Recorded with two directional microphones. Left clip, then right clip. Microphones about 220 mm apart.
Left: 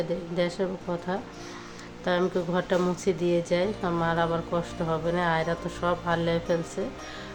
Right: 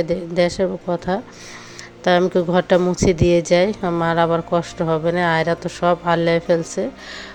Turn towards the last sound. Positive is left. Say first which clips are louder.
# right 9 dB
turn(degrees=-30)  # may be behind; listen again after turning